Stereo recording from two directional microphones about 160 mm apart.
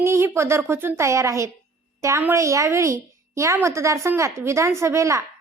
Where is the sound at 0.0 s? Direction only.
15° right (ahead or behind).